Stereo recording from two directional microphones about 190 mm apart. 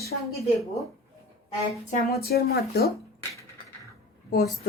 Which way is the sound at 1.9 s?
55° left (ahead or behind).